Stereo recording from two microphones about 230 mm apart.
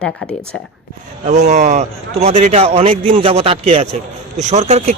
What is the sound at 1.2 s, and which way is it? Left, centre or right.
A man's voice, right.